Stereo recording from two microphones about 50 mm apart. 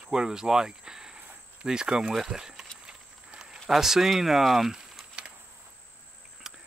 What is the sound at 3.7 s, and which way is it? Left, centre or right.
Speech, centre.